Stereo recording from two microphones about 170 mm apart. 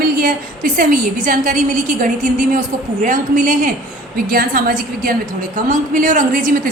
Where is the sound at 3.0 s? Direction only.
50° right (ahead or behind).